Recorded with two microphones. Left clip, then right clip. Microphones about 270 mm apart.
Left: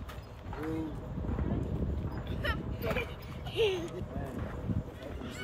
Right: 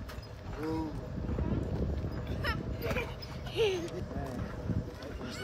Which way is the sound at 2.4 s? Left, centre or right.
Centre.